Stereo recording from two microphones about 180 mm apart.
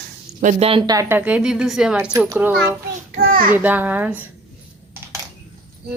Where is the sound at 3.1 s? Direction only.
55° right (ahead or behind).